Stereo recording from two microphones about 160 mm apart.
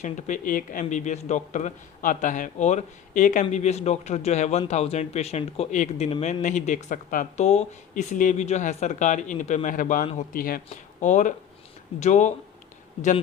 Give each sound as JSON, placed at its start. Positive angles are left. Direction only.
{"t": 0.0, "sound": "speech", "side_deg": 50}
{"t": 10.7, "sound": "speech", "side_deg": 50}